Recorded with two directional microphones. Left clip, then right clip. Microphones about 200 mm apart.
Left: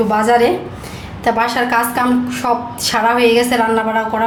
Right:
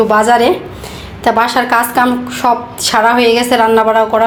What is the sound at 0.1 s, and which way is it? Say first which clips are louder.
A woman's voice: right 4 dB; 25° right (ahead or behind).